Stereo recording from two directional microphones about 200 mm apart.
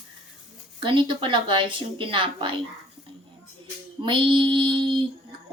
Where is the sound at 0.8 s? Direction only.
25° right (ahead or behind).